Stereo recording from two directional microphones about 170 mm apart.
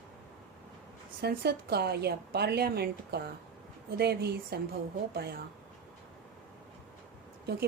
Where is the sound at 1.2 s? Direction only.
70° right (ahead or behind).